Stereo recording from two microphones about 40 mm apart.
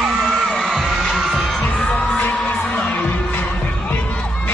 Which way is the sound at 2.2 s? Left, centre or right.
Left.